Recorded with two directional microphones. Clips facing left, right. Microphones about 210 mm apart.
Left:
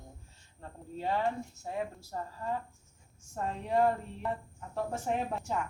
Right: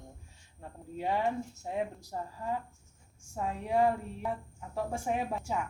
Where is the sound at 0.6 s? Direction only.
15° right (ahead or behind).